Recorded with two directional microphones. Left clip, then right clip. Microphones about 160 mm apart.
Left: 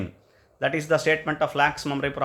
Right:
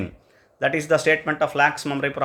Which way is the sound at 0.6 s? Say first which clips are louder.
Right 3 dB; 10° right (ahead or behind).